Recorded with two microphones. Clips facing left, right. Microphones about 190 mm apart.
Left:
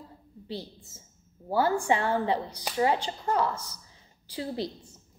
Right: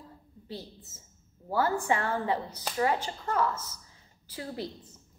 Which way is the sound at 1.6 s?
20° left (ahead or behind).